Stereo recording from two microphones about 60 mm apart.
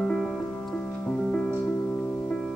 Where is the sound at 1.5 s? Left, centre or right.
Left.